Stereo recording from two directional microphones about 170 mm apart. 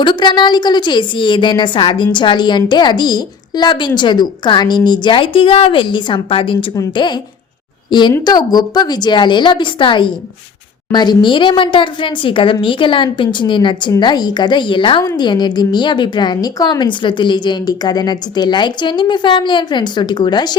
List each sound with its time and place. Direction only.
0.0 s a woman's voice: 25° left (ahead or behind)